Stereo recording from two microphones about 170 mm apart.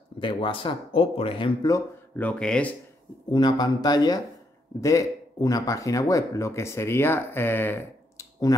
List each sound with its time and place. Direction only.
0.2 s speech: 30° left (ahead or behind)
2.1 s speech: 10° left (ahead or behind)
3.3 s speech: 25° left (ahead or behind)